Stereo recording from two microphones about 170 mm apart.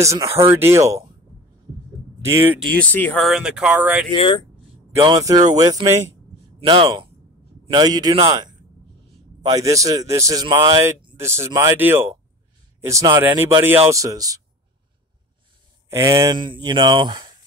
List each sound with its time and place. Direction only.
0.0 s speech: 15° right (ahead or behind)
2.2 s speech: 15° right (ahead or behind)
2.7 s speech: 10° left (ahead or behind)
3.3 s speech: 5° right (ahead or behind)
4.1 s speech: 30° left (ahead or behind)
5.0 s a man's voice: 25° right (ahead or behind)
15.9 s a man's voice: 20° right (ahead or behind)